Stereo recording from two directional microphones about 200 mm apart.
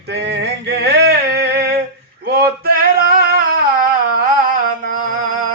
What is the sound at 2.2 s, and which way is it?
Male singing, 50° right (ahead or behind).